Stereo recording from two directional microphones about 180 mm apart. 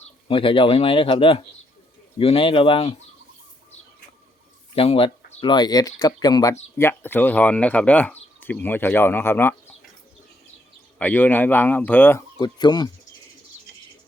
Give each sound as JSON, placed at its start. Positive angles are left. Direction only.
{"t": 0.0, "sound": "speech", "side_deg": 30}
{"t": 4.7, "sound": "speech", "side_deg": 30}
{"t": 10.9, "sound": "speech", "side_deg": 10}
{"t": 12.4, "sound": "speech", "side_deg": 25}